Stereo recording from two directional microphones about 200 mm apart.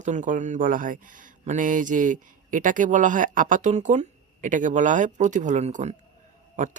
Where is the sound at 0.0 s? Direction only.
35° right (ahead or behind).